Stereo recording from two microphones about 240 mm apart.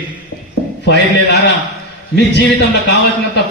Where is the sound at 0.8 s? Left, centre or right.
Left.